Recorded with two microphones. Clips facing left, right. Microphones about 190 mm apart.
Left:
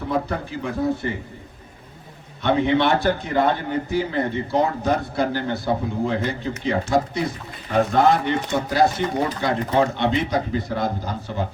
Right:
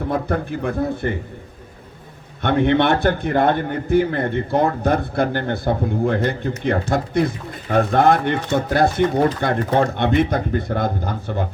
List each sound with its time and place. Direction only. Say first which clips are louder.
0.1 s speech: right 1 dB; 55° right (ahead or behind)
2.4 s speech: right 2 dB; 55° right (ahead or behind)